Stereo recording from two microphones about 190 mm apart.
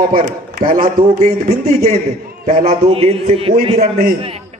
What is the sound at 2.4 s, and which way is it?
A man's voice, 35° right (ahead or behind).